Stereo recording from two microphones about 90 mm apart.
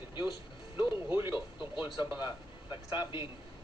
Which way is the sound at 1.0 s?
25° right (ahead or behind).